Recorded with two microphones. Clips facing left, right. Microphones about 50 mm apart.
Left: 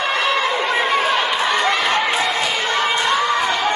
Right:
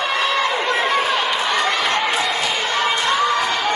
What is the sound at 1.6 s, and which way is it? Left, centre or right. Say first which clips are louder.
Chatter: left 1 dB; left.